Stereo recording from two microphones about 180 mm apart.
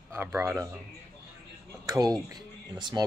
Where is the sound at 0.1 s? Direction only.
15° right (ahead or behind).